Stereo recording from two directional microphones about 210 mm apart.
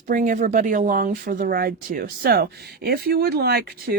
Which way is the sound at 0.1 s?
40° right (ahead or behind).